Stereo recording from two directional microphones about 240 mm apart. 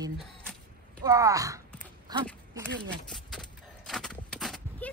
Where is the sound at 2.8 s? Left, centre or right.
Centre.